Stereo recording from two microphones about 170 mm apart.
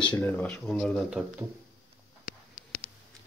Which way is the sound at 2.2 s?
70° left (ahead or behind).